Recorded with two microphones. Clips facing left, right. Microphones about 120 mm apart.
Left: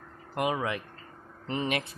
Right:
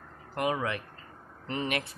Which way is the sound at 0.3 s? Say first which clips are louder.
Left 1 dB; 20° left (ahead or behind).